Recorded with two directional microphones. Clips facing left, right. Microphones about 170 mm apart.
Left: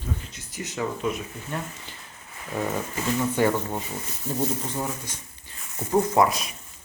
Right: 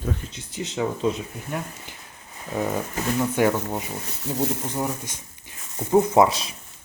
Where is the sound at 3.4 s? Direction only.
10° right (ahead or behind).